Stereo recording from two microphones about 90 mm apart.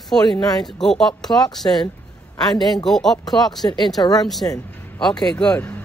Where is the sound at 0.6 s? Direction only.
5° left (ahead or behind).